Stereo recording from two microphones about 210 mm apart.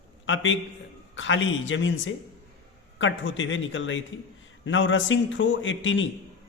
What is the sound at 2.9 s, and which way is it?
A man's voice, 65° left (ahead or behind).